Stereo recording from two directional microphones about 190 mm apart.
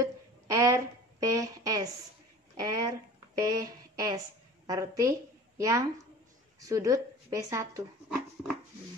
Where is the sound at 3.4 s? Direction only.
20° right (ahead or behind).